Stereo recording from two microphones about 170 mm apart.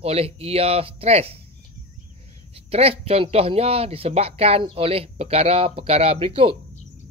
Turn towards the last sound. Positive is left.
turn(degrees=-35)  # may be behind; listen again after turning